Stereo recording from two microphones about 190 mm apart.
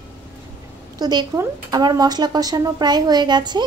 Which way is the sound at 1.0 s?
20° right (ahead or behind).